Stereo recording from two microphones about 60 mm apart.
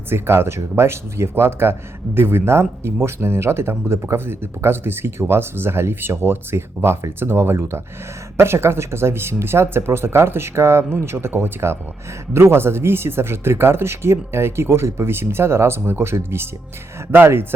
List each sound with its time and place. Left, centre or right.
0.1 s speech: right